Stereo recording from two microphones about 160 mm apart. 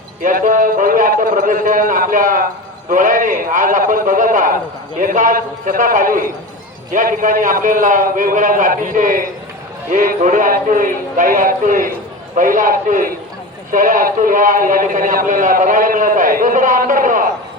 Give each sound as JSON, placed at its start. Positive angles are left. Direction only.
{"t": 0.2, "sound": "a man's voice", "side_deg": -55}